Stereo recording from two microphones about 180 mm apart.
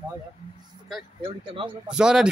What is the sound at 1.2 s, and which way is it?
Speech, 30° right (ahead or behind).